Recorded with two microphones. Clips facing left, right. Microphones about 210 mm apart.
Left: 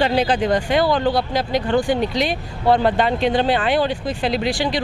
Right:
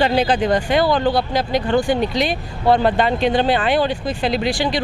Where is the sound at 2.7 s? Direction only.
20° right (ahead or behind).